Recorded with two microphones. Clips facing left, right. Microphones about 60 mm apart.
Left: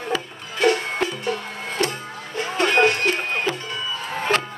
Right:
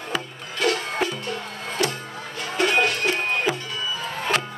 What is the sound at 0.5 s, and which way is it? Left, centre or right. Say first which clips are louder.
Music: left 4 dB; centre.